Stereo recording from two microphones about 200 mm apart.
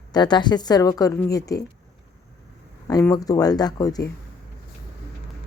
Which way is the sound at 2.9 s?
15° left (ahead or behind).